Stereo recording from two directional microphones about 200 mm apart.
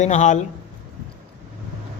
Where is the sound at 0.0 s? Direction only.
35° left (ahead or behind).